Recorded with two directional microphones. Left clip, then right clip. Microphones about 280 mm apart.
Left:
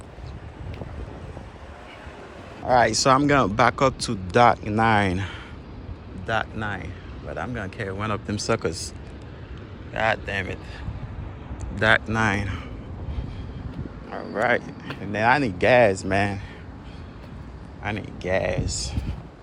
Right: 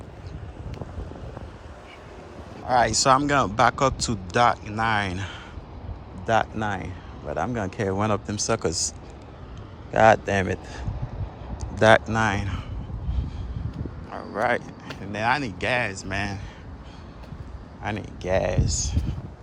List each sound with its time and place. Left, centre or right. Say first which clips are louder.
2.6 s speech: left 1 dB; centre
6.2 s speech: right 3 dB; right
9.9 s speech: right 7 dB; right
11.8 s speech: right 2 dB; centre
14.1 s a sound: left 2 dB; centre
15.1 s speech: left 4 dB; centre
17.8 s speech: even; centre